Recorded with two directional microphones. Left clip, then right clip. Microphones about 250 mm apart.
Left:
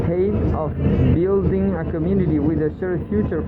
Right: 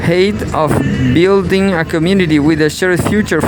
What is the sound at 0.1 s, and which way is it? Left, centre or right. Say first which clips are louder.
Speech: right 9 dB; right.